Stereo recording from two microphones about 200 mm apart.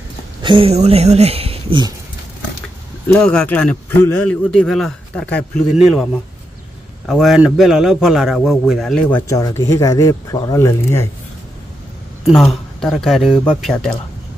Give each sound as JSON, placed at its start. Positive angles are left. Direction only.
{"t": 0.4, "sound": "speech", "side_deg": -25}
{"t": 3.1, "sound": "a man's voice", "side_deg": 5}
{"t": 7.1, "sound": "a man's voice", "side_deg": 0}
{"t": 9.3, "sound": "speech", "side_deg": 15}
{"t": 12.3, "sound": "a man's voice", "side_deg": 0}